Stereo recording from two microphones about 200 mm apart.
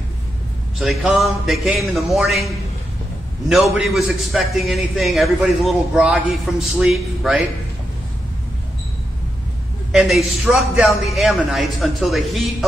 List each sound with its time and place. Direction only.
0.7 s a man's voice: centre (ahead or behind)
3.7 s a man's voice: centre (ahead or behind)
9.9 s a man's voice: centre (ahead or behind)